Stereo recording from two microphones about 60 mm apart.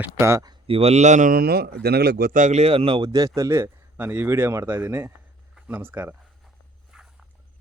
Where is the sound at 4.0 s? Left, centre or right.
Right.